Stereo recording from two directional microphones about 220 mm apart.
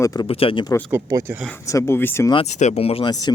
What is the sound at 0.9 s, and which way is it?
Speech, 10° right (ahead or behind).